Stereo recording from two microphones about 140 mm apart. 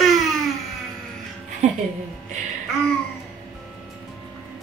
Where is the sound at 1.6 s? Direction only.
55° right (ahead or behind).